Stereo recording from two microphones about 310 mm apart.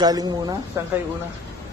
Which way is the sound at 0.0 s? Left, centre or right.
Centre.